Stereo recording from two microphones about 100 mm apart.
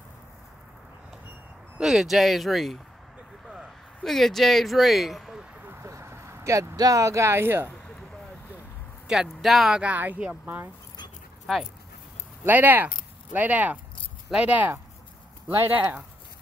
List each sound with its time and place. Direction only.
1.8 s speech: 5° right (ahead or behind)
3.4 s a sound: centre (ahead or behind)
5.7 s vehicle: 25° right (ahead or behind)
6.8 s speech: 35° right (ahead or behind)
9.0 s speech: 5° right (ahead or behind)
12.4 s speech: 20° right (ahead or behind)